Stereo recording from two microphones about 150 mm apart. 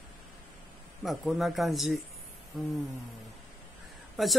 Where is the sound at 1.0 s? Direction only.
Centre (ahead or behind).